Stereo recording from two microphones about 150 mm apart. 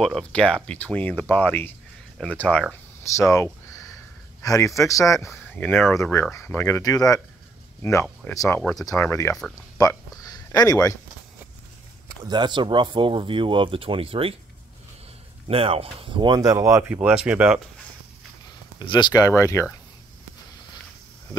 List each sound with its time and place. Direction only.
0.0 s speech: 5° left (ahead or behind)
2.7 s speech: 20° left (ahead or behind)
12.2 s speech: 30° right (ahead or behind)
15.4 s speech: 40° right (ahead or behind); by 17.6 s 5° right (ahead or behind)
18.8 s speech: 30° left (ahead or behind)